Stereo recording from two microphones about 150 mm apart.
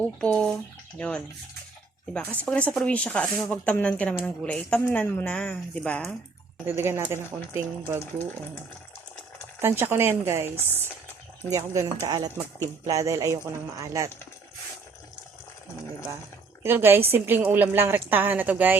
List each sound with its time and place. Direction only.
0.0 s speech: 10° left (ahead or behind)
6.7 s a woman's voice: 15° right (ahead or behind)
9.6 s a woman's voice: 15° right (ahead or behind)
16.6 s a woman's voice: 15° right (ahead or behind)